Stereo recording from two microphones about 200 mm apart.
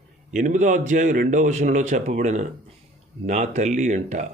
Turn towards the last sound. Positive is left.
turn(degrees=-35)  # may be behind; listen again after turning